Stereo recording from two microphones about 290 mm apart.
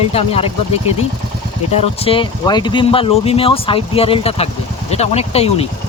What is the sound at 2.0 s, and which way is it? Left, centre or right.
Speech, centre.